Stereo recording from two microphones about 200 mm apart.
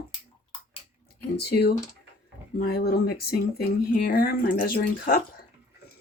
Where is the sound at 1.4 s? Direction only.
55° left (ahead or behind).